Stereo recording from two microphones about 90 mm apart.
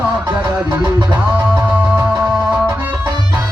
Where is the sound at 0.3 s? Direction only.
45° right (ahead or behind).